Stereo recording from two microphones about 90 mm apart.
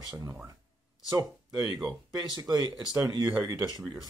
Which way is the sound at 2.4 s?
45° right (ahead or behind).